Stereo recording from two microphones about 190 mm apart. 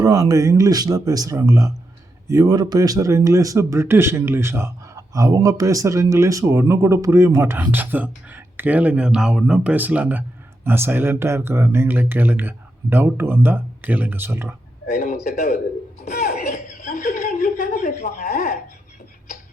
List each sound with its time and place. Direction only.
0.0 s a man's voice: 20° right (ahead or behind)
14.8 s a man's voice: 50° left (ahead or behind)
16.0 s a sound: 50° left (ahead or behind)
16.5 s chuckle: 45° left (ahead or behind)